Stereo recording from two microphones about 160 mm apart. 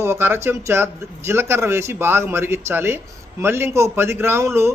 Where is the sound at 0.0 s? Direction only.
15° right (ahead or behind).